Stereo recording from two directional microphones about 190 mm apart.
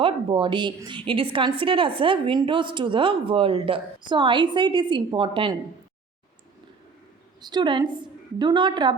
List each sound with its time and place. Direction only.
0.0 s a woman's voice: 25° right (ahead or behind)
7.4 s a woman's voice: 25° right (ahead or behind)